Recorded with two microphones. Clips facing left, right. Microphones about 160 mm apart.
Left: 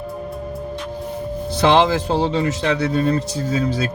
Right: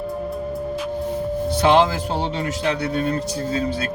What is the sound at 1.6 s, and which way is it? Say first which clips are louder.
Speech: left 2 dB; 90° left.